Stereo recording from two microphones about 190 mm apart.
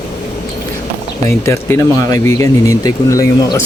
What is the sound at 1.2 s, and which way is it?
Speech, 15° left (ahead or behind).